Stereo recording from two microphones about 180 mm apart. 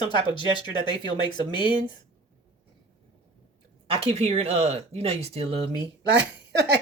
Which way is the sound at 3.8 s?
30° right (ahead or behind).